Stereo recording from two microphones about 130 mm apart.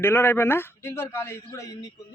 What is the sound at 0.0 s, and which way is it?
A man's voice, 20° left (ahead or behind).